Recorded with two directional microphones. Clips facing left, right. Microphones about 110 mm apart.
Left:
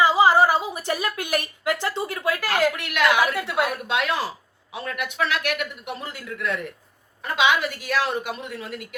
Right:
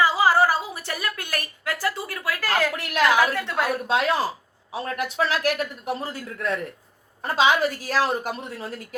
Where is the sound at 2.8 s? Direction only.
35° right (ahead or behind).